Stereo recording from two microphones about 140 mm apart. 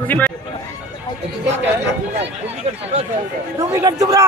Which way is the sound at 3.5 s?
20° right (ahead or behind).